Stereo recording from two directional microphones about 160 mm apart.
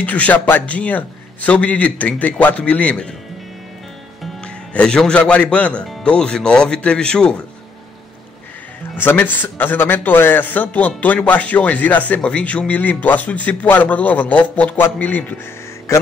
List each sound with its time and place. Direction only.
0.0 s speech: 10° left (ahead or behind)
4.2 s a man's voice: 5° left (ahead or behind)
8.9 s speech: 10° left (ahead or behind)